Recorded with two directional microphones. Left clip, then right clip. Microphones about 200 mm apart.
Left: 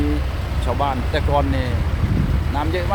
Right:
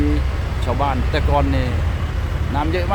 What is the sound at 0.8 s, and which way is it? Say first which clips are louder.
Speech: right 1 dB; 5° right (ahead or behind).